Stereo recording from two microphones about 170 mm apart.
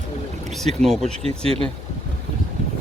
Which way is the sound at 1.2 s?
35° right (ahead or behind).